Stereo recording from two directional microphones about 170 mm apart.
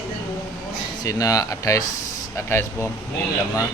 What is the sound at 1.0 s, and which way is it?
Speech, 20° left (ahead or behind).